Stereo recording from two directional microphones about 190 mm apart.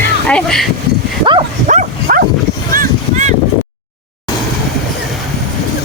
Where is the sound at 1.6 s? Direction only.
45° right (ahead or behind).